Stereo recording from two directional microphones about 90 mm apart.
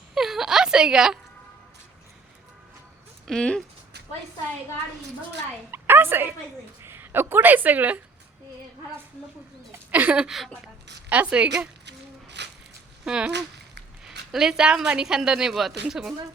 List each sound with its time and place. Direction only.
0.1 s a sound: 5° right (ahead or behind)
3.2 s speech: 10° left (ahead or behind)
5.7 s a sound: 25° right (ahead or behind)
6.8 s a woman's voice: 25° right (ahead or behind)
9.9 s speech: 15° right (ahead or behind)
11.1 s speech: 15° right (ahead or behind)
13.1 s speech: 10° right (ahead or behind)